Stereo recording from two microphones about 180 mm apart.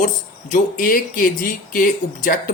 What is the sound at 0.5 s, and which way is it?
Speech, 50° left (ahead or behind).